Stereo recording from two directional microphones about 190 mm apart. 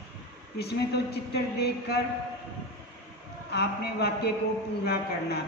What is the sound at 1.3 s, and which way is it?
Speech, 55° left (ahead or behind).